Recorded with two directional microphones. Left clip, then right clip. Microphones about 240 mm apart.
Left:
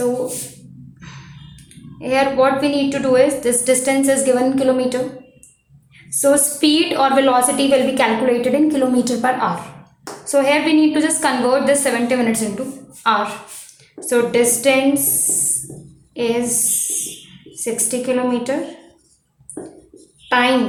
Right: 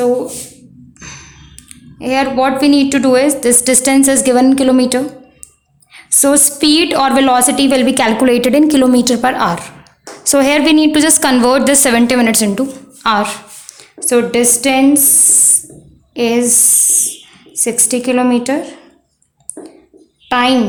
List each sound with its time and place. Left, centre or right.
0.9 s a sound: right
2.0 s a woman's voice: right
6.1 s a woman's voice: right
16.1 s a woman's voice: right
17.5 s a woman's voice: right
20.2 s a sound: right